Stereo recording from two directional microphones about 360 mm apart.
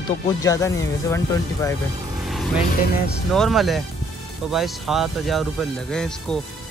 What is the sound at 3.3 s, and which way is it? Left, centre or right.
Speech, centre.